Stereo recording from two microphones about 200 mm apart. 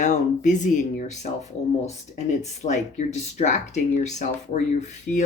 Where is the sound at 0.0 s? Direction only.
40° left (ahead or behind).